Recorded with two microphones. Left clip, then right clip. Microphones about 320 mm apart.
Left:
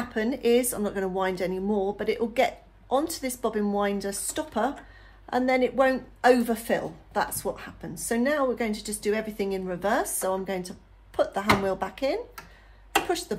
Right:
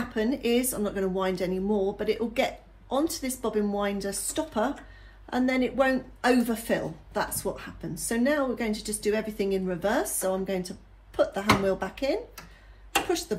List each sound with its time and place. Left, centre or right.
0.0 s speech: left
13.3 s speech: left